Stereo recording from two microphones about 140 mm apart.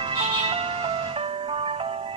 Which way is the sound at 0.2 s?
45° right (ahead or behind).